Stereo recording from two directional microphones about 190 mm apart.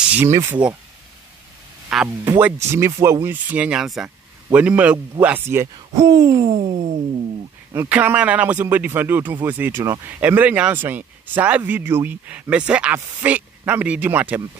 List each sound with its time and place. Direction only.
0.0 s speech: 10° right (ahead or behind)
1.9 s speech: 5° right (ahead or behind); by 6.5 s 20° right (ahead or behind)
6.5 s music: 35° right (ahead or behind)
7.7 s speech: 10° right (ahead or behind)